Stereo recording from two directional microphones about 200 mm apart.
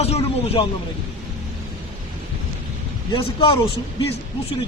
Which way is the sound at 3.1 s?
25° left (ahead or behind).